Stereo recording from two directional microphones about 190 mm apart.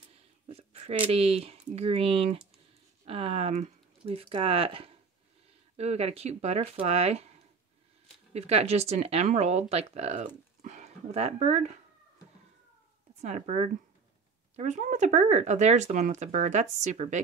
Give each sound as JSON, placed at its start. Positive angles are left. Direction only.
{"t": 0.1, "sound": "a sound", "side_deg": -30}
{"t": 1.1, "sound": "speech", "side_deg": -30}
{"t": 13.1, "sound": "speech", "side_deg": -35}